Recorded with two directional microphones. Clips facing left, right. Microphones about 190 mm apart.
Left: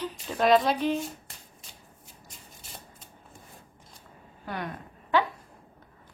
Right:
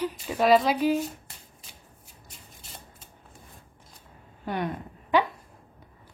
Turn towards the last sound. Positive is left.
turn(degrees=-20)  # may be behind; listen again after turning